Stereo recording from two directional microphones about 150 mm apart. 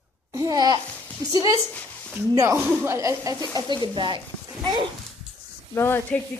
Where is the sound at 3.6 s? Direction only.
30° right (ahead or behind).